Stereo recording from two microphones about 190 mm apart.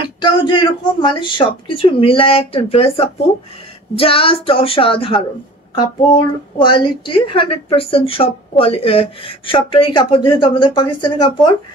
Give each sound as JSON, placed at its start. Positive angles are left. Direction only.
{"t": 0.2, "sound": "a child's voice", "side_deg": 25}